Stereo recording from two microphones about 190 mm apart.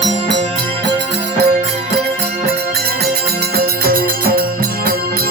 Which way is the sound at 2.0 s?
60° right (ahead or behind).